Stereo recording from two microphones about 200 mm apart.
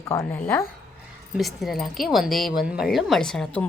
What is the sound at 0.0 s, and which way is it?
A woman's voice, 15° left (ahead or behind).